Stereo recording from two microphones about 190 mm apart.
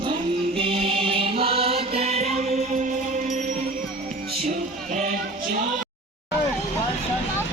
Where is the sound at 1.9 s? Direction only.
35° right (ahead or behind).